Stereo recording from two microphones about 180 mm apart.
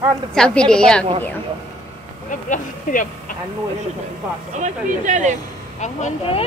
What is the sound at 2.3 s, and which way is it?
Speech, 45° left (ahead or behind).